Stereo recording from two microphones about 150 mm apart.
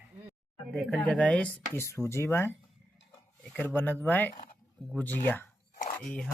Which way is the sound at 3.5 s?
10° left (ahead or behind).